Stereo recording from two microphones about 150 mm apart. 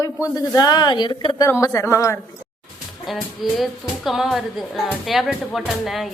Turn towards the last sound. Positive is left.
turn(degrees=0)  # may be behind; listen again after turning